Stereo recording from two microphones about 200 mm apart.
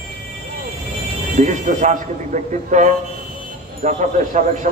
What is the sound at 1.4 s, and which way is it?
Speech, 35° right (ahead or behind).